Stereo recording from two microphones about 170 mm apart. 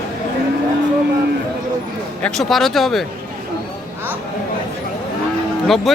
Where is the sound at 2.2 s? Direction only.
5° left (ahead or behind).